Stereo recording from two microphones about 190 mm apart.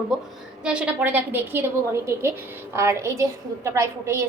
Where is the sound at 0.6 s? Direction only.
5° right (ahead or behind).